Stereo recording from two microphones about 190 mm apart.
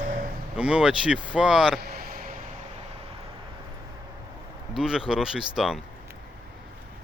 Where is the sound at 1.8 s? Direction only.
50° right (ahead or behind).